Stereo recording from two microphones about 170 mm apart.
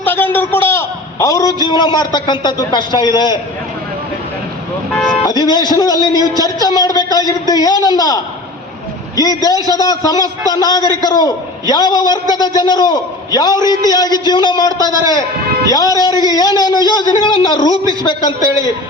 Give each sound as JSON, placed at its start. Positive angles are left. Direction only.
{"t": 0.0, "sound": "a man's voice", "side_deg": 10}
{"t": 5.2, "sound": "a man's voice", "side_deg": 25}